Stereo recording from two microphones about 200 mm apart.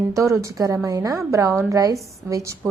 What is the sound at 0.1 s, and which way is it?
A woman's voice, 15° right (ahead or behind).